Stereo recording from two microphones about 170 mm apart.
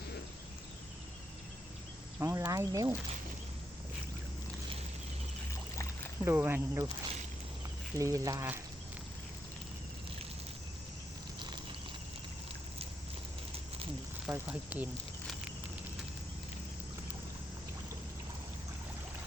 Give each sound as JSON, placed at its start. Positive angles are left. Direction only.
{"t": 2.1, "sound": "speech", "side_deg": -15}
{"t": 6.2, "sound": "speech", "side_deg": -15}
{"t": 7.9, "sound": "speech", "side_deg": -20}
{"t": 11.3, "sound": "a sound", "side_deg": -25}
{"t": 14.3, "sound": "speech", "side_deg": -10}